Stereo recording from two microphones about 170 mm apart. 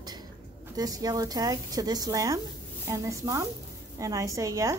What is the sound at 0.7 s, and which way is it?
A woman's voice, 20° right (ahead or behind).